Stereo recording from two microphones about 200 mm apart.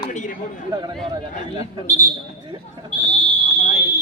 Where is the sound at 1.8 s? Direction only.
10° left (ahead or behind).